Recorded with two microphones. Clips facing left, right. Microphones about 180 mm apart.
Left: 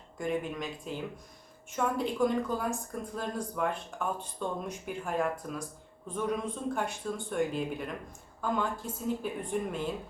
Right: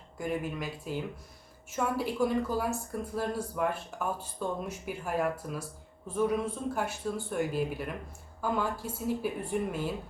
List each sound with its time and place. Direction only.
0.2 s speech: 5° right (ahead or behind)
1.7 s speech: 5° right (ahead or behind)